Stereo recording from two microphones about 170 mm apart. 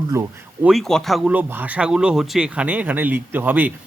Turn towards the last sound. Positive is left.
turn(degrees=-10)  # may be behind; listen again after turning